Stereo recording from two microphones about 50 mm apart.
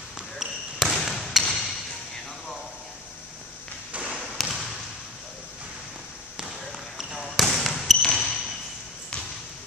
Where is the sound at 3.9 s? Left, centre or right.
Right.